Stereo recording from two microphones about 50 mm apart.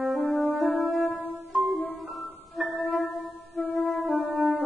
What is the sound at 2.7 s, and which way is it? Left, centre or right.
Music, left.